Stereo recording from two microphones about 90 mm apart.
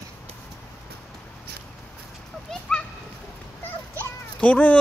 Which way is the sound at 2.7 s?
10° left (ahead or behind).